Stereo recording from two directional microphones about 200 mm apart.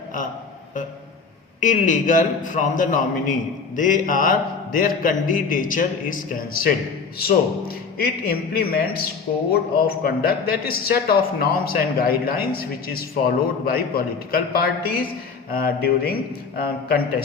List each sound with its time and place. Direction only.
1.6 s a man's voice: 40° left (ahead or behind)